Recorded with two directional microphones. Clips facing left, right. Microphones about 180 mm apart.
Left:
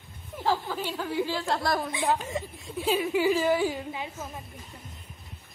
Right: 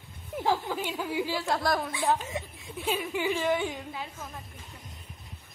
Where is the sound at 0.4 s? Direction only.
15° right (ahead or behind).